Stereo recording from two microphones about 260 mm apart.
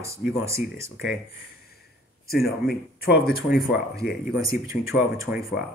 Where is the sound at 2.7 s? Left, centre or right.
Left.